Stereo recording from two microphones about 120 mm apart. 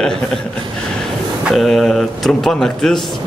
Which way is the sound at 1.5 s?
Centre (ahead or behind).